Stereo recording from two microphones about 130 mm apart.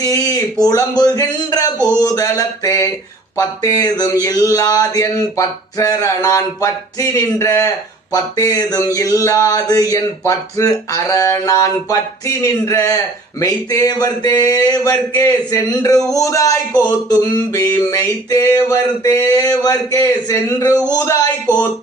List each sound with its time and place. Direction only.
0.0 s speech: 30° left (ahead or behind)
2.0 s mantra: 30° left (ahead or behind)